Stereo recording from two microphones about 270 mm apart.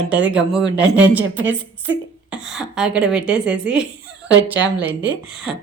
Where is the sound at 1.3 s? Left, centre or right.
Right.